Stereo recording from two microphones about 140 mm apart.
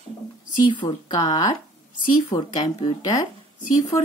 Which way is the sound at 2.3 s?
20° left (ahead or behind).